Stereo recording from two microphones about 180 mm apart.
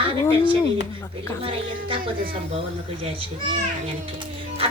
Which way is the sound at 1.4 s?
30° right (ahead or behind).